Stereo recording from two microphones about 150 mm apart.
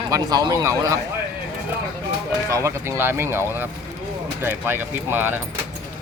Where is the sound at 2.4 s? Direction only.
20° right (ahead or behind).